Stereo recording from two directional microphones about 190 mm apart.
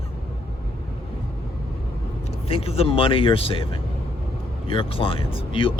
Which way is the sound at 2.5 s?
30° left (ahead or behind).